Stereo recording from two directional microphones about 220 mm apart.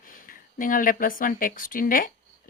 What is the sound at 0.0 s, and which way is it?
Speech, 40° left (ahead or behind).